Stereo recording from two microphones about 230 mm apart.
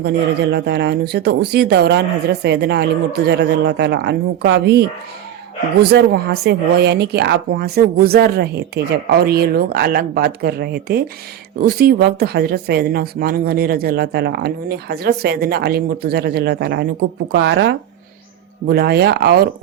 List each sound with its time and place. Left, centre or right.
0.5 s speech: right
5.8 s speech: right